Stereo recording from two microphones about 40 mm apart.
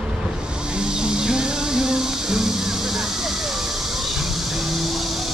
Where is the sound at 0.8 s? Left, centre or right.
Centre.